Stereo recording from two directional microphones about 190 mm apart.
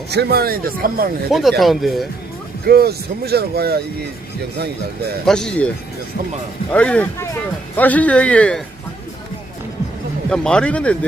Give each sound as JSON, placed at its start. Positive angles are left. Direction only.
{"t": 0.1, "sound": "speech", "side_deg": -60}
{"t": 1.3, "sound": "speech", "side_deg": 0}
{"t": 2.6, "sound": "speech", "side_deg": -55}
{"t": 5.2, "sound": "speech", "side_deg": 5}
{"t": 10.2, "sound": "speech", "side_deg": 5}